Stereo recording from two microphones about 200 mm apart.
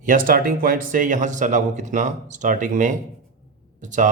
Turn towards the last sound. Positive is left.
turn(degrees=-40)  # may be behind; listen again after turning